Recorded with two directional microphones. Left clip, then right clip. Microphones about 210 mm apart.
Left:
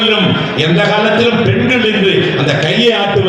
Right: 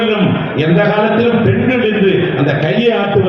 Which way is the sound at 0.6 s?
25° right (ahead or behind).